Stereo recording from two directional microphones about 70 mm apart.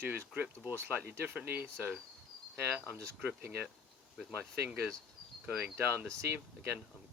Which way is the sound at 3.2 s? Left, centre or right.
Right.